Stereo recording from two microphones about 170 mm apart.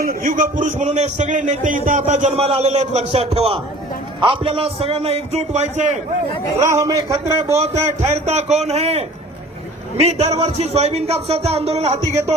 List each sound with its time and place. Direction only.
0.0 s a man's voice: 60° right (ahead or behind); by 6.0 s 45° right (ahead or behind)
6.6 s a man's voice: 20° right (ahead or behind)
8.0 s speech: 40° right (ahead or behind)